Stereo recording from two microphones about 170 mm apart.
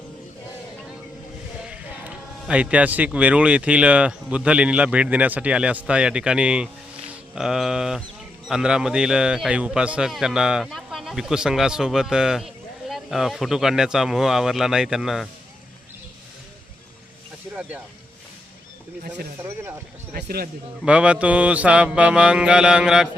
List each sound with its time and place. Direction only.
1.6 s a man's voice: 5° right (ahead or behind)
17.5 s speech: 10° right (ahead or behind)
19.4 s a man's voice: 15° right (ahead or behind)
20.1 s speech: 65° right (ahead or behind)
20.8 s a man's voice: 5° right (ahead or behind)